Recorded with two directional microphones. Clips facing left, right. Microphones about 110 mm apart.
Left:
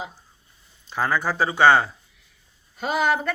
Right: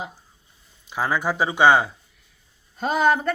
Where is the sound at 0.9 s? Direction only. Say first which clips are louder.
Even; 10° right (ahead or behind).